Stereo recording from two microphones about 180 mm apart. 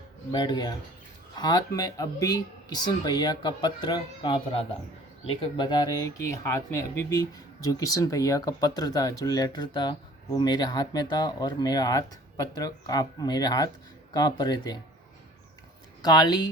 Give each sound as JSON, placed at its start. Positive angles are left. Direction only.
{"t": 0.3, "sound": "speech", "side_deg": 25}
{"t": 16.0, "sound": "speech", "side_deg": 25}